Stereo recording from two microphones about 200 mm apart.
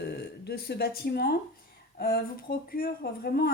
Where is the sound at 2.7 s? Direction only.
50° left (ahead or behind).